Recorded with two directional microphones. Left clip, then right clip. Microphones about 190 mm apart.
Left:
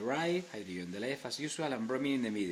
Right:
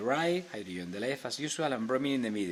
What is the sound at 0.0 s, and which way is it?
Speech, 25° right (ahead or behind).